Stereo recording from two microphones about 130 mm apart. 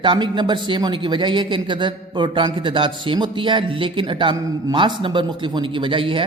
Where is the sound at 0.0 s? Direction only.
35° right (ahead or behind).